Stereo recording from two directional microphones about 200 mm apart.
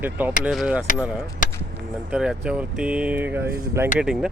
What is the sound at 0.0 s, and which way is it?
Speech, 10° right (ahead or behind).